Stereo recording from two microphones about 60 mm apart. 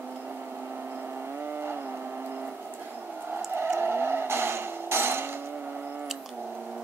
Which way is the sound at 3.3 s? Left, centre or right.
Right.